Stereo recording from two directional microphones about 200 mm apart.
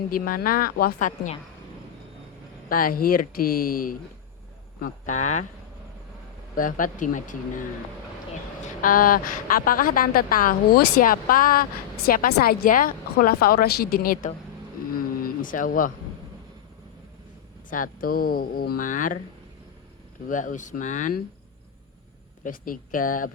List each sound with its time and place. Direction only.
0.1 s a woman's voice: 45° left (ahead or behind)
2.6 s a woman's voice: 45° left (ahead or behind)
6.6 s speech: 40° left (ahead or behind)
8.6 s a woman's voice: 45° left (ahead or behind)
14.9 s a sound: 45° left (ahead or behind)
17.7 s a woman's voice: 40° left (ahead or behind)
20.2 s speech: 40° left (ahead or behind)
22.4 s a woman's voice: 45° left (ahead or behind)